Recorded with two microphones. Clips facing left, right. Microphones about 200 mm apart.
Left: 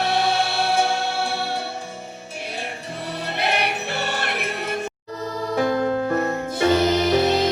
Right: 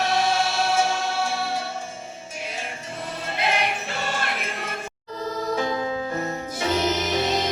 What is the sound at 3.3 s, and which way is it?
Music, 65° left (ahead or behind).